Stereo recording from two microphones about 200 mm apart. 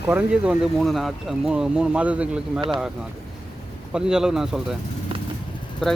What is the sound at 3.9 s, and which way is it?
Speech, 5° right (ahead or behind).